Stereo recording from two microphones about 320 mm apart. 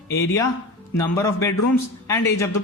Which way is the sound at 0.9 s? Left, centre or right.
Centre.